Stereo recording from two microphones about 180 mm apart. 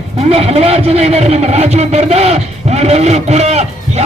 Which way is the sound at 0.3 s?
35° right (ahead or behind).